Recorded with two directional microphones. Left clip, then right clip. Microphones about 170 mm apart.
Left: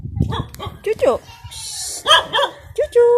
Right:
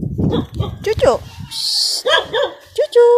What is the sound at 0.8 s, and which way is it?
Music, centre (ahead or behind).